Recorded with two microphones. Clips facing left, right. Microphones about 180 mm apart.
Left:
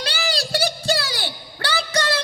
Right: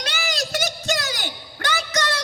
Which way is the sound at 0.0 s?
30° left (ahead or behind).